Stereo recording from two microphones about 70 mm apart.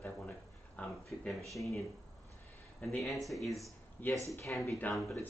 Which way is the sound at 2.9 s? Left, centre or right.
Centre.